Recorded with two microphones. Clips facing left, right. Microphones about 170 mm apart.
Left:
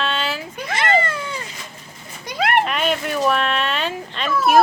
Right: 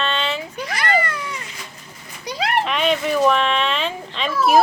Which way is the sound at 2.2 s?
55° left (ahead or behind).